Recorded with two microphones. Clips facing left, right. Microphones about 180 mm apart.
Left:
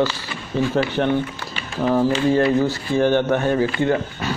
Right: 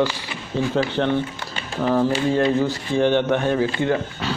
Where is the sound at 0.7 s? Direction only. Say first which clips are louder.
Even; 10° left (ahead or behind).